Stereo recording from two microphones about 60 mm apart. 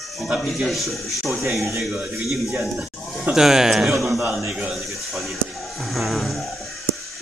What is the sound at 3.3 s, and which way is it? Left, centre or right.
Speech, centre.